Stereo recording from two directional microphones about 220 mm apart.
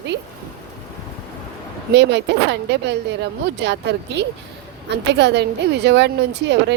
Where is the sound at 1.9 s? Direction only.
50° right (ahead or behind).